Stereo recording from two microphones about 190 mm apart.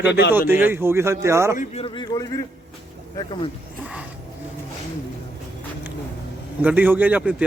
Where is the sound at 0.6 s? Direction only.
10° right (ahead or behind).